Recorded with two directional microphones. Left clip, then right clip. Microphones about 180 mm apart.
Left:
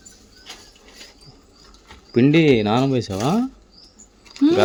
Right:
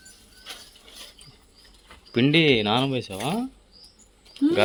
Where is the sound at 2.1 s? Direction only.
15° left (ahead or behind).